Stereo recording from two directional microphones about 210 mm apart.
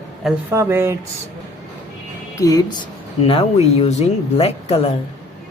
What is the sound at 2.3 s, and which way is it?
Speech, 15° left (ahead or behind).